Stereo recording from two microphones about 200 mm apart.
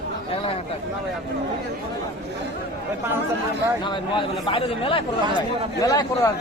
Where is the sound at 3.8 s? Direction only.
25° left (ahead or behind).